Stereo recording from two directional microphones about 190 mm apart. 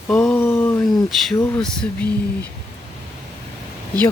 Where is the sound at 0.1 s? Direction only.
5° left (ahead or behind).